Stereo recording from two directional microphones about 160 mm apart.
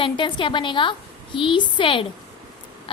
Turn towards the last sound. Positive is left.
turn(degrees=35)  # may be behind; listen again after turning